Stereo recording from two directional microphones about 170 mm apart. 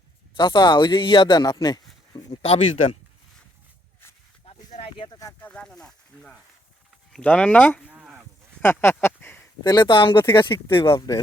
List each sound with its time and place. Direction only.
0.3 s speech: 25° left (ahead or behind)
2.4 s speech: 35° left (ahead or behind)
4.4 s snake: 35° left (ahead or behind)
5.0 s speech: 25° left (ahead or behind)
5.4 s speech: 5° left (ahead or behind)
7.9 s a sound: 5° right (ahead or behind)
8.6 s speech: 15° left (ahead or behind)
9.7 s speech: 30° left (ahead or behind)